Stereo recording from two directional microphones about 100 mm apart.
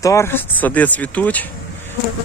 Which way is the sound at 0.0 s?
30° left (ahead or behind).